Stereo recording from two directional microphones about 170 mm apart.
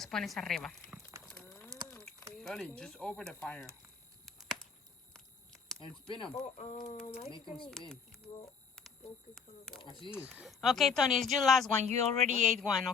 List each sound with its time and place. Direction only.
0.0 s speech: centre (ahead or behind)
1.3 s a sound: 10° left (ahead or behind)
2.3 s speech: 5° left (ahead or behind)
4.3 s a sound: centre (ahead or behind)
6.1 s speech: 30° left (ahead or behind)
6.3 s speech: 40° left (ahead or behind)
9.3 s speech: centre (ahead or behind)
9.8 s speech: 30° left (ahead or behind)
10.3 s speech: centre (ahead or behind)
11.8 s speech: 40° right (ahead or behind)
12.5 s speech: centre (ahead or behind)